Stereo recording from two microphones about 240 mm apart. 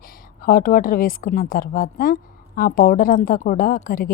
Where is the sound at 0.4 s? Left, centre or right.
Left.